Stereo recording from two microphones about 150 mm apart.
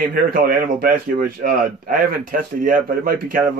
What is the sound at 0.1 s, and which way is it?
Speech, 70° right (ahead or behind).